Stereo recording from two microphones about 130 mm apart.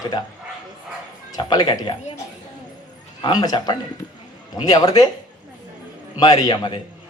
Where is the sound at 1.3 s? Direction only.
30° left (ahead or behind).